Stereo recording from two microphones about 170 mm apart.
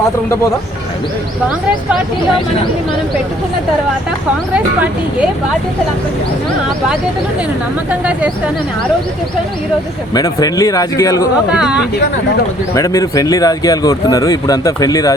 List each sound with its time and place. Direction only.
4.5 s speech: 5° right (ahead or behind)
10.2 s speech: 20° left (ahead or behind)
11.5 s speech: 5° right (ahead or behind)
12.7 s speech: 20° left (ahead or behind)